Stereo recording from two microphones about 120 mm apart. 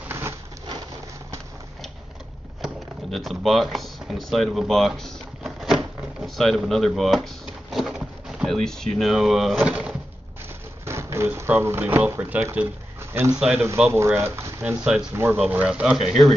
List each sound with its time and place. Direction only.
2.6 s speech: centre (ahead or behind)
9.6 s bird: 10° right (ahead or behind)
10.9 s speech: 20° right (ahead or behind)
13.4 s speech: 5° right (ahead or behind)
13.9 s speech: 20° right (ahead or behind)
14.6 s speech: 10° right (ahead or behind)